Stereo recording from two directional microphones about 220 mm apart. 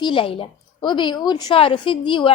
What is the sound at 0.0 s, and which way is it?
A woman's voice, 25° left (ahead or behind).